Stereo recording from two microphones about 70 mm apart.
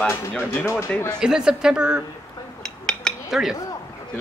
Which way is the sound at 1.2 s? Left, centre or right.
Centre.